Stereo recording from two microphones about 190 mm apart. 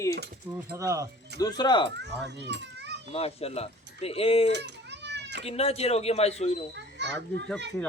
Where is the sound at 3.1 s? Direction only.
30° left (ahead or behind).